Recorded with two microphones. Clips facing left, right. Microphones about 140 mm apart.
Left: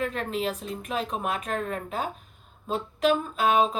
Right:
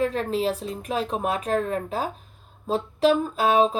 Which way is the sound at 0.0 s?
35° right (ahead or behind).